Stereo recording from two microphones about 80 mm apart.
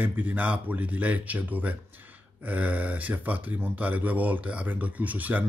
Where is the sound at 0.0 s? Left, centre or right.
Centre.